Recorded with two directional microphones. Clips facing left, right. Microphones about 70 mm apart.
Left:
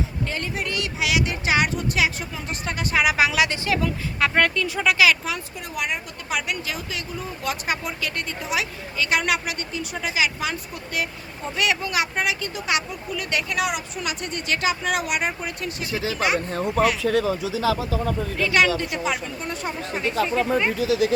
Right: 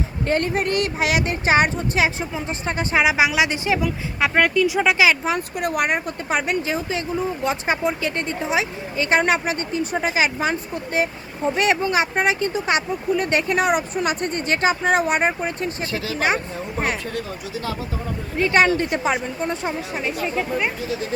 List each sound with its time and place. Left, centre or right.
0.3 s a woman's voice: right
5.5 s speech: right
6.2 s a woman's voice: right
15.9 s speech: left
16.1 s a woman's voice: right
16.5 s speech: left
18.3 s a woman's voice: right
20.2 s speech: centre
20.7 s speech: left